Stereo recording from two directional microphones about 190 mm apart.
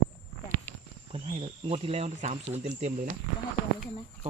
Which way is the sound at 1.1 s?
30° right (ahead or behind).